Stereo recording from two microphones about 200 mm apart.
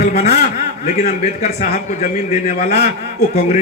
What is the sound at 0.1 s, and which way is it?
A man's voice, 35° left (ahead or behind).